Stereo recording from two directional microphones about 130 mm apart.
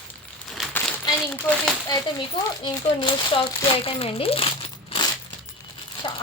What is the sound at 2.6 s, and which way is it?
Speech, 40° left (ahead or behind).